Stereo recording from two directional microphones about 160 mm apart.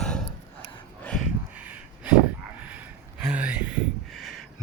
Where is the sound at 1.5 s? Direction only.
10° right (ahead or behind).